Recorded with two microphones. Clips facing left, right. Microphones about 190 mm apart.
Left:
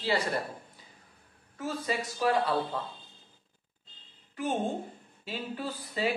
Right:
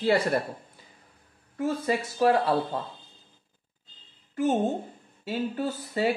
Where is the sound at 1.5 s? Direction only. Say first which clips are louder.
Right 6 dB; 55° right (ahead or behind).